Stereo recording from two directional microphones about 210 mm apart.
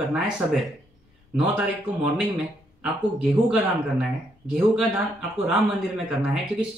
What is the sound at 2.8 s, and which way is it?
Speech, 5° right (ahead or behind).